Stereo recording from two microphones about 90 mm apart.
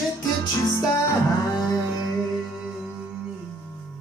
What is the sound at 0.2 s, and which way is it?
Music, 45° left (ahead or behind).